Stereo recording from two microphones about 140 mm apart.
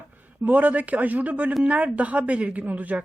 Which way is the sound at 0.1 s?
10° right (ahead or behind).